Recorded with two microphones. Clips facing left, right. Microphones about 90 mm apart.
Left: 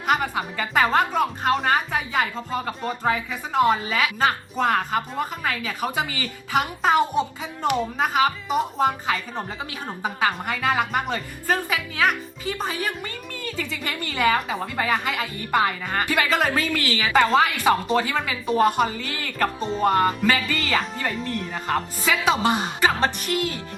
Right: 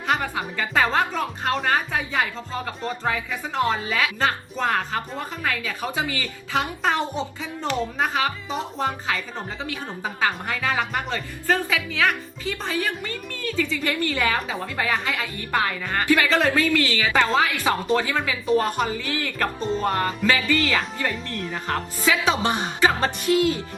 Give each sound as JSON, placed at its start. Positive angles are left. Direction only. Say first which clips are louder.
{"t": 0.1, "sound": "a woman's voice", "louder": "left 2 dB", "side_deg": 15}